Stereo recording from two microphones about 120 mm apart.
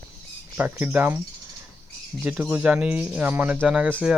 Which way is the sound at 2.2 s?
10° right (ahead or behind).